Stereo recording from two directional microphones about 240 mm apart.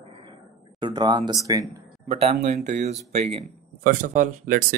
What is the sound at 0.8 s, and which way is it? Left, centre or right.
Speech, centre.